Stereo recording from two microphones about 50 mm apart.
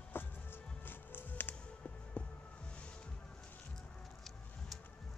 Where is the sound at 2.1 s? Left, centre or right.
Left.